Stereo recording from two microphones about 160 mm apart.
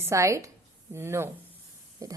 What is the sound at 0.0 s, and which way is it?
A woman's voice, 20° right (ahead or behind).